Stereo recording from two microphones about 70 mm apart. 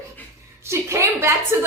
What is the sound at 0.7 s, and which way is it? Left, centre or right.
Speech, right.